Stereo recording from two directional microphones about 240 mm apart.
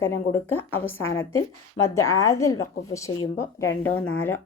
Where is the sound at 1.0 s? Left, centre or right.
Left.